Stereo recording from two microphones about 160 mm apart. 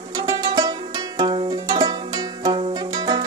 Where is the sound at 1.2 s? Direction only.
35° right (ahead or behind).